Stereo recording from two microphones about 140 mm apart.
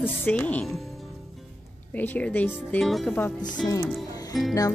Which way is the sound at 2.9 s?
Centre (ahead or behind).